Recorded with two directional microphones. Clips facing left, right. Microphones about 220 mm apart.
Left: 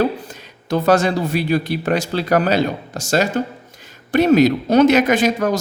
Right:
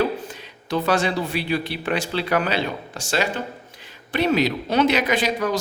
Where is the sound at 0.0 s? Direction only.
40° left (ahead or behind).